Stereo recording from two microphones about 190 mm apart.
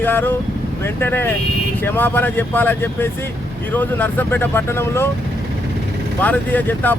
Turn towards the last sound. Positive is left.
turn(degrees=10)  # may be behind; listen again after turning